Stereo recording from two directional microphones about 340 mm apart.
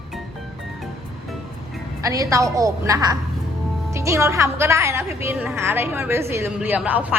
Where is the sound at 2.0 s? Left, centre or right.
Centre.